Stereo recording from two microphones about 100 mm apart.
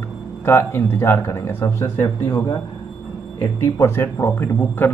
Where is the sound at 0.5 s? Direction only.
25° left (ahead or behind).